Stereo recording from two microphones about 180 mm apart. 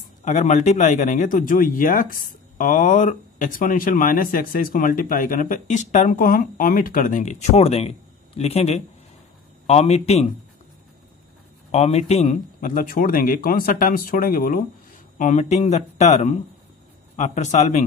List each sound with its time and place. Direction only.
0.2 s speech: 40° left (ahead or behind)
11.7 s speech: 35° left (ahead or behind)